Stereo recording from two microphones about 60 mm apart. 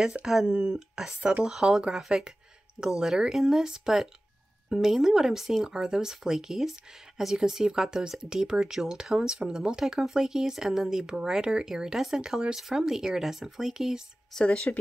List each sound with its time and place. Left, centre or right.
0.1 s speech: centre
0.5 s speech: right
0.7 s speech: centre
14.3 s speech: centre